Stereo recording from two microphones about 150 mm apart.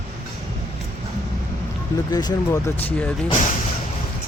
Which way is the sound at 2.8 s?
10° left (ahead or behind).